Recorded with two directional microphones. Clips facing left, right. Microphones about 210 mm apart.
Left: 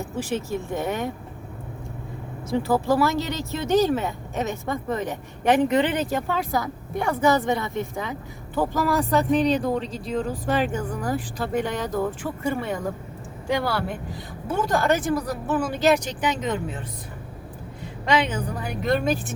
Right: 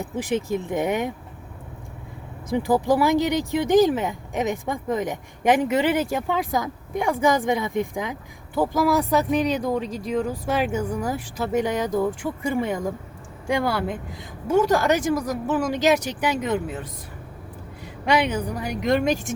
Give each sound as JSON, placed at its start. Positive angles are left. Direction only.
{"t": 0.0, "sound": "speech", "side_deg": -15}
{"t": 2.5, "sound": "speech", "side_deg": -15}
{"t": 18.0, "sound": "speech", "side_deg": -10}